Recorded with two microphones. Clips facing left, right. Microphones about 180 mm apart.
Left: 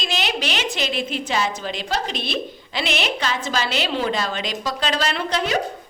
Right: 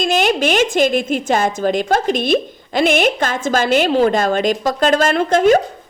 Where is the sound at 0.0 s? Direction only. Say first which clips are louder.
Right 10 dB; 50° right (ahead or behind).